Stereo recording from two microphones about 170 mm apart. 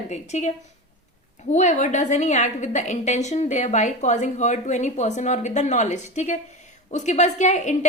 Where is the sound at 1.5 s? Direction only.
45° left (ahead or behind).